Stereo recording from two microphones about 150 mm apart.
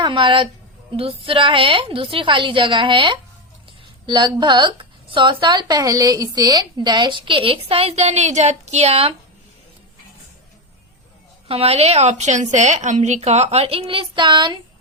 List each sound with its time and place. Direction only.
0.0 s a woman's voice: 35° right (ahead or behind)
11.4 s speech: 40° right (ahead or behind)